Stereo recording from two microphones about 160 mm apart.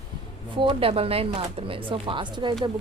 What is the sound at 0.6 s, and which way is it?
A woman's voice, 35° right (ahead or behind).